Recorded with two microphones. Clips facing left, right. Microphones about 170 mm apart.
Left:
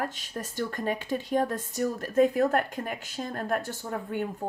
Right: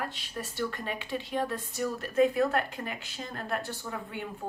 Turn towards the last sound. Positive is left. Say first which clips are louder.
# left 6 dB
turn(degrees=45)  # may be behind; listen again after turning